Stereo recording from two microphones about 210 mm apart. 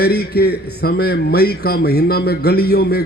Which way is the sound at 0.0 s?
50° left (ahead or behind).